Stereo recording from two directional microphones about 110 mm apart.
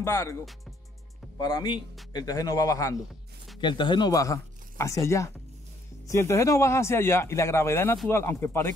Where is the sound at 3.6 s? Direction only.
45° left (ahead or behind).